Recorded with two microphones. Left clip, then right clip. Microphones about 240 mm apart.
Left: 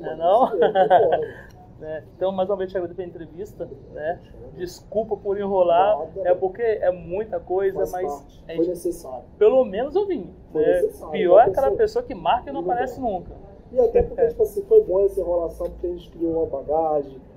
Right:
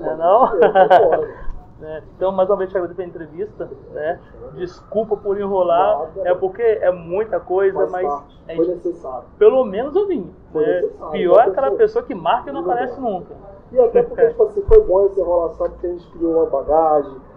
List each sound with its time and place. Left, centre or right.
0.0 s speech: left